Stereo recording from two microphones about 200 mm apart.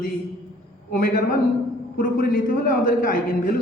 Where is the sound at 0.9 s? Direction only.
45° left (ahead or behind).